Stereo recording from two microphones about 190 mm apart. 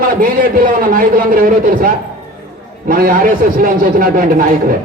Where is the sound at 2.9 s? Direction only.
50° right (ahead or behind).